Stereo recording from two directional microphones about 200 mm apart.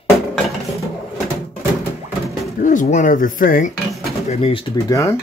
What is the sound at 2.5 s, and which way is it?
Speech, 45° left (ahead or behind).